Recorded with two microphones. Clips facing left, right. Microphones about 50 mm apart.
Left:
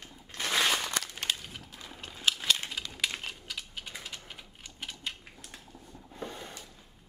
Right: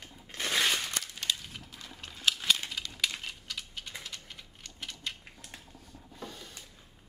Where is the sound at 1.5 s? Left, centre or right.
Centre.